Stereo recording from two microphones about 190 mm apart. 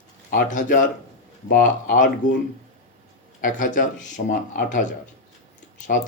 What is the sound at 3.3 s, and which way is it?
A man's voice, 45° left (ahead or behind).